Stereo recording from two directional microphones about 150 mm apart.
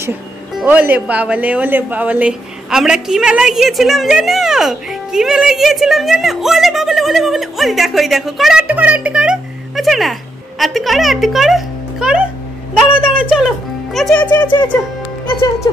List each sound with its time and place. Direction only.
0.7 s speech: 10° right (ahead or behind)
12.7 s a sound: 5° right (ahead or behind)
13.9 s speech: 5° left (ahead or behind)
15.7 s speech: 30° left (ahead or behind)